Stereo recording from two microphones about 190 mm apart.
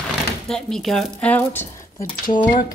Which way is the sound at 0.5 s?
5° left (ahead or behind).